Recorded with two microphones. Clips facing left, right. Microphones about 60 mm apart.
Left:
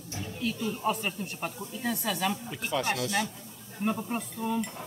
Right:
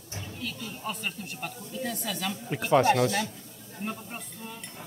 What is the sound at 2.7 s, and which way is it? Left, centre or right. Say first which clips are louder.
Speech: right 9 dB; right.